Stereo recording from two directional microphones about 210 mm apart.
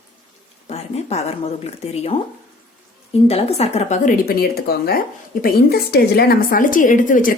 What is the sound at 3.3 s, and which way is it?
A woman's voice, 30° left (ahead or behind).